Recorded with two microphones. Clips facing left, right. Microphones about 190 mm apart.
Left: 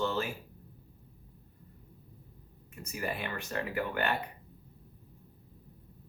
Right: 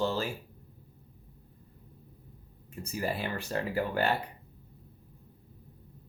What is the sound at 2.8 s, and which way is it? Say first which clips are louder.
Speech: right 3 dB; 30° right (ahead or behind).